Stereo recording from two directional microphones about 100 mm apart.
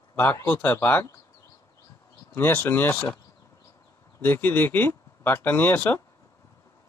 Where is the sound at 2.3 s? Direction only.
20° left (ahead or behind).